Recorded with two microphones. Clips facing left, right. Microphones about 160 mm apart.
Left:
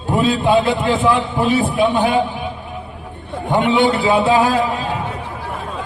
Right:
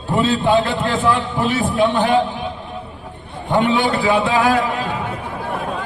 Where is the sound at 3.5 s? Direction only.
15° left (ahead or behind).